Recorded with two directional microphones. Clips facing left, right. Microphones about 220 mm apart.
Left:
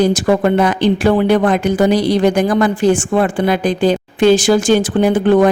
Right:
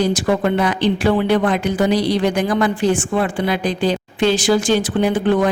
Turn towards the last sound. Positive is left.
turn(degrees=45)  # may be behind; listen again after turning